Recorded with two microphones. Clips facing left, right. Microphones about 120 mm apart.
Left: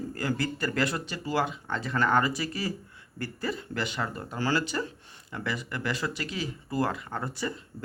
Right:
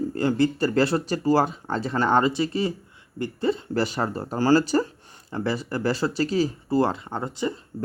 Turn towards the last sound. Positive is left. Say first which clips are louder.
# right 5 dB
turn(degrees=-20)  # may be behind; listen again after turning